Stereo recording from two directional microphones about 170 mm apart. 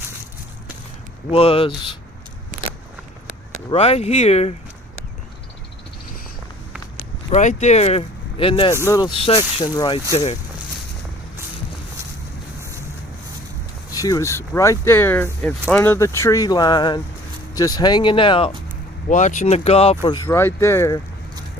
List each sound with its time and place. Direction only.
1.3 s speech: 35° left (ahead or behind)
3.7 s speech: 35° left (ahead or behind)
7.3 s speech: 45° left (ahead or behind)
8.7 s speech: 15° left (ahead or behind)
13.9 s speech: 20° left (ahead or behind)
19.0 s speech: 45° left (ahead or behind)
20.1 s speech: 20° left (ahead or behind)